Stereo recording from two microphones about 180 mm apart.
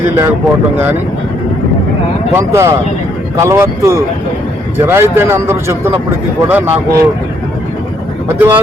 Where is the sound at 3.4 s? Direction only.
15° right (ahead or behind).